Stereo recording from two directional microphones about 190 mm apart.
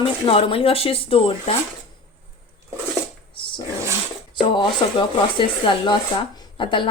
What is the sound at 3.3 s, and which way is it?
Dog, 25° left (ahead or behind).